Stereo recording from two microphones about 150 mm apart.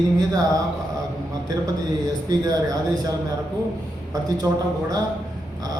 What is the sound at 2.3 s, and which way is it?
Speech, 25° right (ahead or behind).